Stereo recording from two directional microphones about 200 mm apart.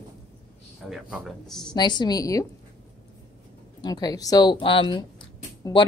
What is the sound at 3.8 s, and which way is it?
A woman's voice, 20° left (ahead or behind).